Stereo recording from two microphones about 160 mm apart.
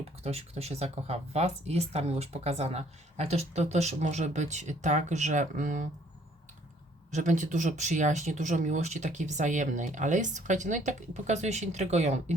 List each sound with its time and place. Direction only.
0.2 s speech: 40° right (ahead or behind)
7.1 s speech: 50° right (ahead or behind)